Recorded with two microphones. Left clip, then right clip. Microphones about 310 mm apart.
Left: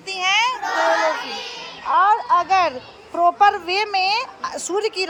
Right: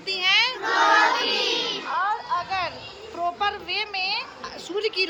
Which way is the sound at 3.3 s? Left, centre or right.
Left.